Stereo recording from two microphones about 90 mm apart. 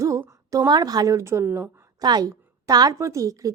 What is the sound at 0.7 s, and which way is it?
A woman's voice, 50° right (ahead or behind).